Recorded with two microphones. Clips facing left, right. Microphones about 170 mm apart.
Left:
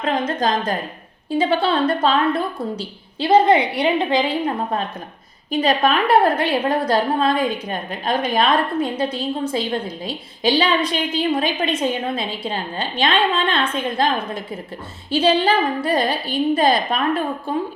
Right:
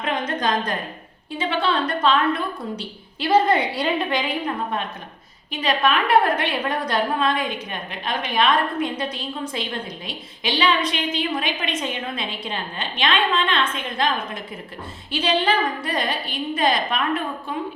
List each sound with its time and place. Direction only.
0.0 s a woman's voice: 30° left (ahead or behind)